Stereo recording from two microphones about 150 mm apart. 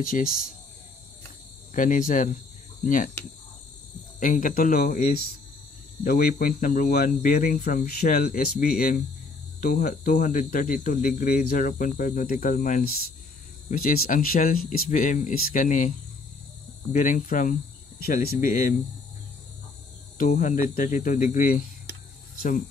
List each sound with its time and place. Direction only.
0.0 s speech: 65° left (ahead or behind)
1.7 s speech: 60° left (ahead or behind)
4.2 s speech: 65° left (ahead or behind); by 5.3 s 85° left
6.0 s speech: 75° left (ahead or behind)
16.9 s speech: 60° left (ahead or behind)
18.0 s speech: 85° left; by 18.8 s 65° left (ahead or behind)
20.2 s speech: 55° left (ahead or behind)